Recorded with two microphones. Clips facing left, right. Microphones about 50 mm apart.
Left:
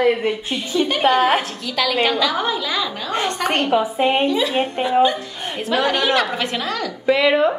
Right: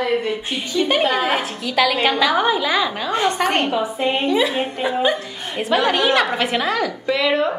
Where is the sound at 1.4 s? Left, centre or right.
Centre.